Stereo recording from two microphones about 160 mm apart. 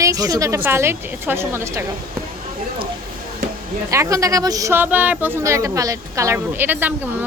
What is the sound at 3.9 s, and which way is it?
Speech, 20° right (ahead or behind).